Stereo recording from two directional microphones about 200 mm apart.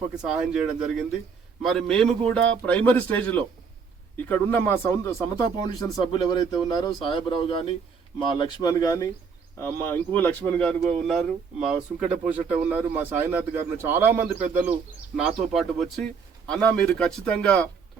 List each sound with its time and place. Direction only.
0.2 s a man's voice: 5° right (ahead or behind)